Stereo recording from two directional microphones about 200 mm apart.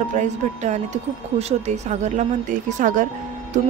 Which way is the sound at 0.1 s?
35° right (ahead or behind).